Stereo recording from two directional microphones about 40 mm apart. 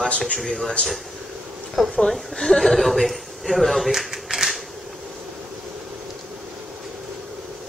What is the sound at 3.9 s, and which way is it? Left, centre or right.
Typewriter, centre.